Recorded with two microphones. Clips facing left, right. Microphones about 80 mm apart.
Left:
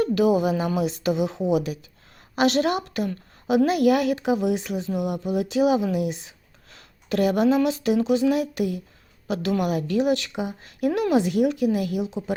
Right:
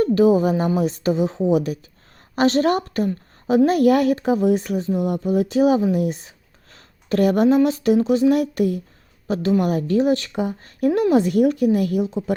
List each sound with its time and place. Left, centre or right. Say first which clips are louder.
0.0 s a woman's voice: right 4 dB; right
9.3 s a woman's voice: right 4 dB; right